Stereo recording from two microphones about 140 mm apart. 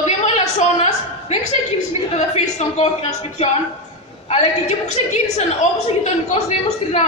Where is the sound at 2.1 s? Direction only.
55° left (ahead or behind).